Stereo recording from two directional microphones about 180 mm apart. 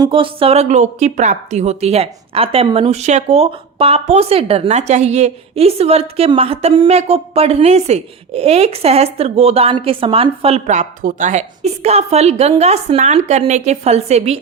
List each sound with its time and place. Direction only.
0.0 s a woman's voice: 30° right (ahead or behind)